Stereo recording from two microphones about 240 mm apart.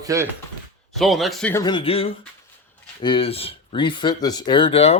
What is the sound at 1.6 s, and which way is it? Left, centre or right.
Speech, centre.